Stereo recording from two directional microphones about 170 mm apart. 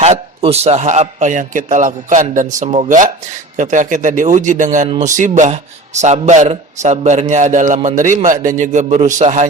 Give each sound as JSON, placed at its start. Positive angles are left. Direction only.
{"t": 0.0, "sound": "a man's voice", "side_deg": -40}